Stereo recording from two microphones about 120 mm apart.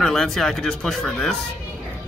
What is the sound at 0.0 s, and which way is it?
Speech, 5° left (ahead or behind).